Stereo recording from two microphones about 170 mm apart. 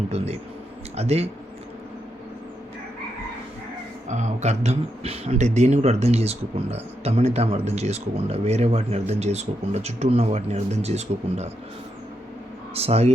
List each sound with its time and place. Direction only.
0.9 s speech: 40° right (ahead or behind)
4.1 s speech: 45° right (ahead or behind)
12.7 s speech: 35° right (ahead or behind)